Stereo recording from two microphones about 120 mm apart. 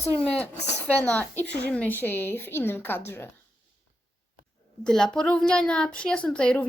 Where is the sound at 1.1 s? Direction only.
10° left (ahead or behind).